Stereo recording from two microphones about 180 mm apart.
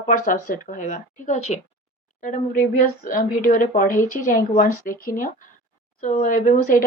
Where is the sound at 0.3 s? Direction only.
50° left (ahead or behind).